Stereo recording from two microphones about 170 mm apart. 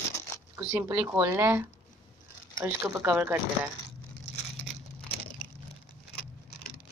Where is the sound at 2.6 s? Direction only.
15° right (ahead or behind).